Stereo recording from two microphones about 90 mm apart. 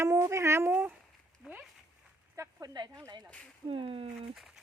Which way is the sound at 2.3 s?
35° right (ahead or behind).